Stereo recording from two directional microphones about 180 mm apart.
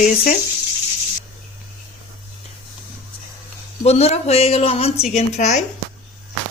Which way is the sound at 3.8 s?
35° left (ahead or behind).